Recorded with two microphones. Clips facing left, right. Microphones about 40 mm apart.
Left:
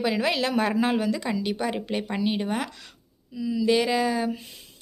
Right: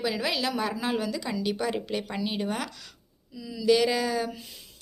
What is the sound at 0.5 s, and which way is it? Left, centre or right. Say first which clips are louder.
Speech: left 5 dB; left.